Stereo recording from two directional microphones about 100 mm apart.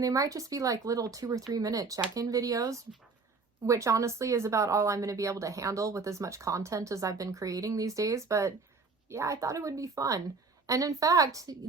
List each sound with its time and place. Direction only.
0.0 s speech: 35° right (ahead or behind)